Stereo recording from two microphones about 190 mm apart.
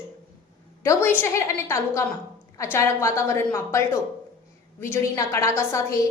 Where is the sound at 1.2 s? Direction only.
15° left (ahead or behind).